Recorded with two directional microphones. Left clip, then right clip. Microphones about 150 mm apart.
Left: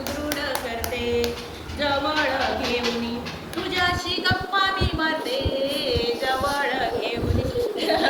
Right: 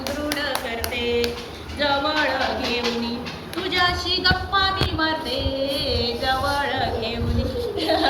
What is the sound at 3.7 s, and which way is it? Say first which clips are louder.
Speech: right 3 dB; 20° left (ahead or behind).